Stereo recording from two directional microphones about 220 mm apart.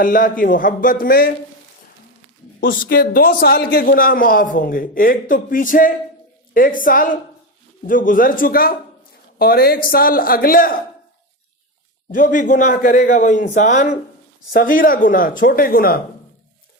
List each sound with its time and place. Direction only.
0.0 s a man's voice: 40° left (ahead or behind)
2.6 s a man's voice: 40° left (ahead or behind)
12.1 s a man's voice: 40° left (ahead or behind)